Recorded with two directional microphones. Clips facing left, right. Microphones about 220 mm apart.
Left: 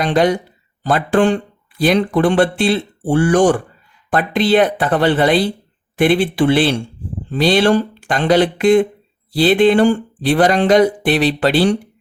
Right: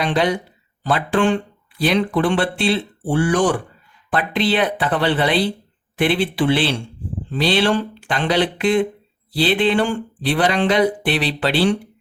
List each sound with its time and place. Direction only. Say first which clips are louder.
0.0 s speech: left 4 dB; 45° left (ahead or behind)